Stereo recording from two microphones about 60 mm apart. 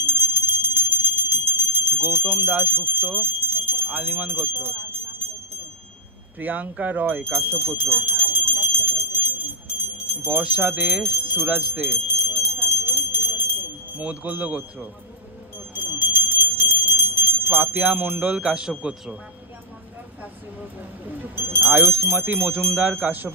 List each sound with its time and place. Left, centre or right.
0.0 s clock: right
4.3 s speech: right
6.4 s speech: right
9.8 s clock: right
10.7 s speech: right
11.9 s bell: right
13.9 s speech: right
15.7 s clock: right
17.6 s speech: right
21.1 s speech: right